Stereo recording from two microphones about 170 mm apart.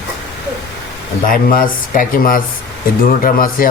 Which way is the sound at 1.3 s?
55° left (ahead or behind).